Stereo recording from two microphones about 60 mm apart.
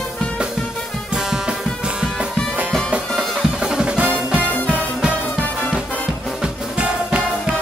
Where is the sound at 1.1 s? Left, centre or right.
Centre.